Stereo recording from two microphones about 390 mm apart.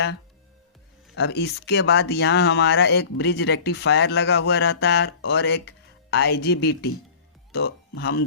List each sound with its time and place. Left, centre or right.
1.1 s speech: left